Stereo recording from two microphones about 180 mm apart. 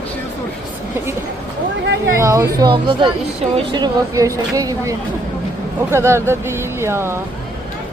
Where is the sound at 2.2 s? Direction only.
15° right (ahead or behind).